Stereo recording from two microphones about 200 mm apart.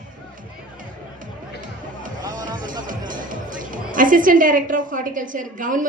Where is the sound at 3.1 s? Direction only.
40° right (ahead or behind).